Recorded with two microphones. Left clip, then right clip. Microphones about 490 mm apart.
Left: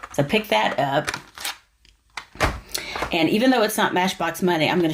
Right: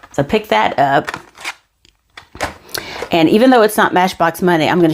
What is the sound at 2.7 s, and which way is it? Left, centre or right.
Speech, right.